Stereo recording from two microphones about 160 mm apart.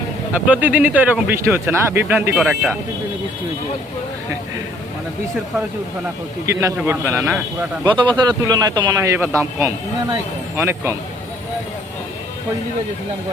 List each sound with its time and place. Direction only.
0.4 s speech: 10° right (ahead or behind)
6.4 s speech: 20° right (ahead or behind)
7.9 s speech: 30° right (ahead or behind)